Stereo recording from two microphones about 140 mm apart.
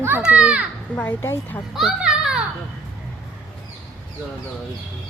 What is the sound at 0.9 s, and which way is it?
Speech, 15° left (ahead or behind).